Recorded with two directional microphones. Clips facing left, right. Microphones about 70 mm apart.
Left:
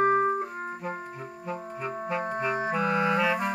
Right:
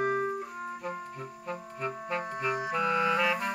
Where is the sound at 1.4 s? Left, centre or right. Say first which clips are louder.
Left 2 dB; centre.